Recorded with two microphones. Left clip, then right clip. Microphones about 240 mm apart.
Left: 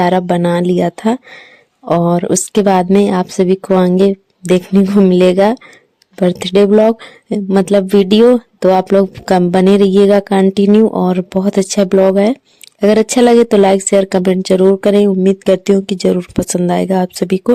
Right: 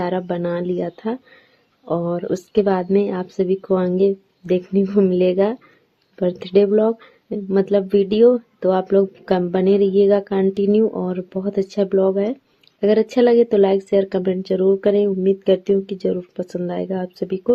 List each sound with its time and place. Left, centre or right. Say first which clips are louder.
0.0 s speech: left 10 dB; left